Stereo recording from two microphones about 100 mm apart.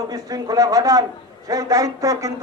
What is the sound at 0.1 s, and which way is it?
A man's voice, 40° right (ahead or behind).